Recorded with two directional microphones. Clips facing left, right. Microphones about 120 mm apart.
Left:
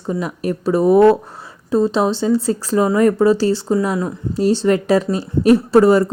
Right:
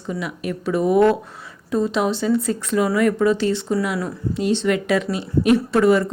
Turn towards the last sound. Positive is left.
turn(degrees=35)  # may be behind; listen again after turning